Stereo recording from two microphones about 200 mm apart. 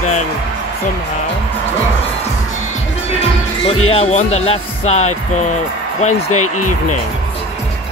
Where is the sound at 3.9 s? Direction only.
30° left (ahead or behind).